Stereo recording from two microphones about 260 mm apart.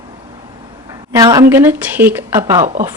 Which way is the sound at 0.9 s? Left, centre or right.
Centre.